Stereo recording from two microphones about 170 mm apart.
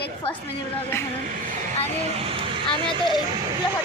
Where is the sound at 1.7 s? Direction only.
35° right (ahead or behind).